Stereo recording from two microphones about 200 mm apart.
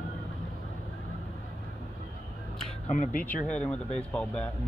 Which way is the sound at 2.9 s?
40° left (ahead or behind).